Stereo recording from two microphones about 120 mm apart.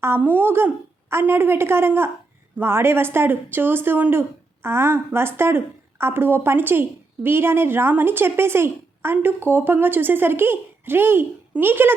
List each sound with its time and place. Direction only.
0.0 s speech: 20° right (ahead or behind)